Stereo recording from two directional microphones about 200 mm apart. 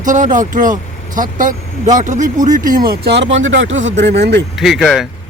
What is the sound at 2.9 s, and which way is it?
Speech, 55° right (ahead or behind).